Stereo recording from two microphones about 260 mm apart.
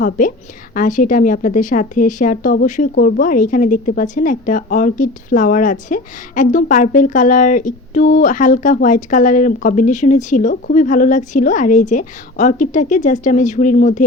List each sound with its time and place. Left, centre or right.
0.0 s a woman's voice: left